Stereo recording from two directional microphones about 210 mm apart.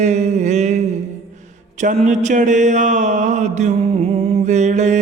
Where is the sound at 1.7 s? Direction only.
35° right (ahead or behind).